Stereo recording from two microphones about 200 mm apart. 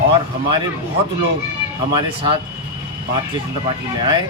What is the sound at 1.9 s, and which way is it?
Speech, 25° right (ahead or behind).